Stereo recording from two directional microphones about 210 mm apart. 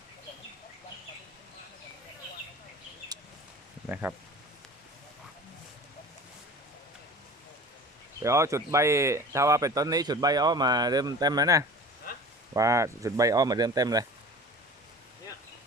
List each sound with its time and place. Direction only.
3.8 s speech: 10° right (ahead or behind)
8.2 s speech: 15° right (ahead or behind)